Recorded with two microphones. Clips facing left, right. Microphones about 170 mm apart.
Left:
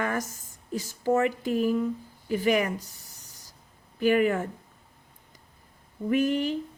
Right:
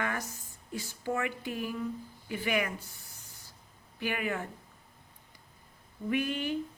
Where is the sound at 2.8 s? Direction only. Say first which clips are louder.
Left 1 dB; 40° left (ahead or behind).